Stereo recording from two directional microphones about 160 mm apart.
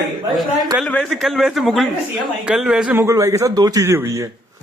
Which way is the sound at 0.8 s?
5° left (ahead or behind).